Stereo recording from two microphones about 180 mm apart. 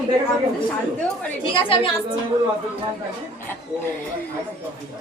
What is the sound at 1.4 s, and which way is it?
Speech, 30° left (ahead or behind).